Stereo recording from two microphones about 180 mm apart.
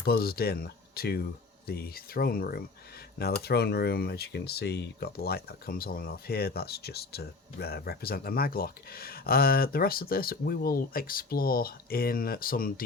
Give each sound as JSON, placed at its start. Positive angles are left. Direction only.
{"t": 0.0, "sound": "speech", "side_deg": 60}